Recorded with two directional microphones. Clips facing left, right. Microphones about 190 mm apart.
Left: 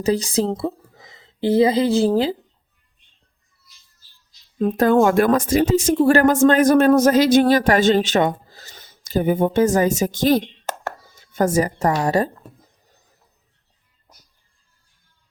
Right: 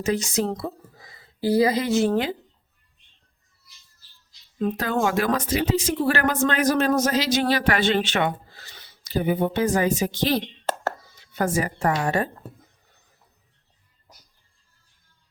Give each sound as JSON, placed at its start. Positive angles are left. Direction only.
{"t": 0.0, "sound": "a woman's voice", "side_deg": 35}
{"t": 4.6, "sound": "speech", "side_deg": 50}